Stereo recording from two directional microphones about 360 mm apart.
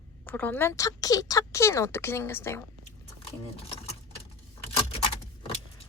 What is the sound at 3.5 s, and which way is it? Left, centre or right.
Sewing machine, centre.